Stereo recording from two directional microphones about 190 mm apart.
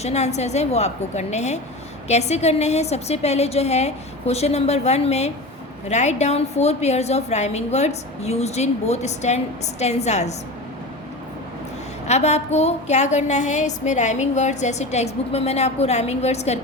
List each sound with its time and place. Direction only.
0.0 s a woman's voice: 35° left (ahead or behind)
12.0 s a woman's voice: 35° left (ahead or behind)